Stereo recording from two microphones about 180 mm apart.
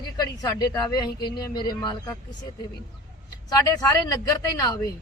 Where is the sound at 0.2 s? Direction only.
20° left (ahead or behind).